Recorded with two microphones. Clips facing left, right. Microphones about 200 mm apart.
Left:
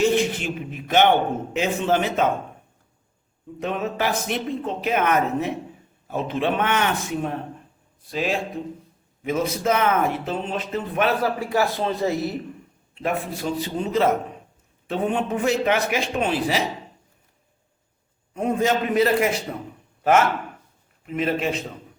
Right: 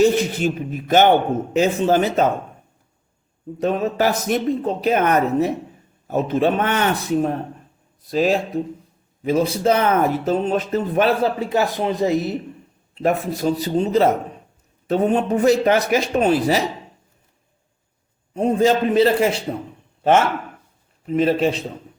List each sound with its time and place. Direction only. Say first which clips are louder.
0.0 s speech: right 4 dB; 40° right (ahead or behind)
3.6 s speech: right 6 dB; 40° right (ahead or behind)
11.2 s speech: right 3 dB; 20° right (ahead or behind)
12.9 s speech: right 6 dB; 40° right (ahead or behind)
18.3 s speech: right 5 dB; 30° right (ahead or behind)
21.0 s speech: right 6 dB; 35° right (ahead or behind)